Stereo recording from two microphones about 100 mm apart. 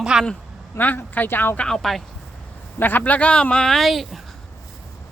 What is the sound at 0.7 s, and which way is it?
Speech, 20° left (ahead or behind).